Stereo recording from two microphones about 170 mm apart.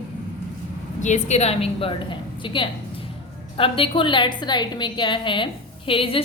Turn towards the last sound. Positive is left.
turn(degrees=30)  # may be behind; listen again after turning